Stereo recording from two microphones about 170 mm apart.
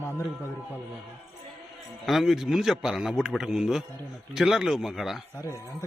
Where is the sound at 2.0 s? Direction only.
Centre (ahead or behind).